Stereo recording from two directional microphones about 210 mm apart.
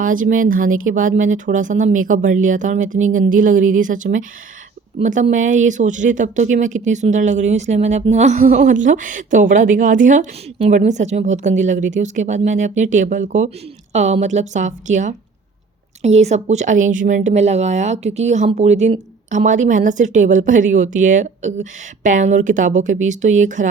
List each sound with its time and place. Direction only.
0.0 s speech: 40° right (ahead or behind)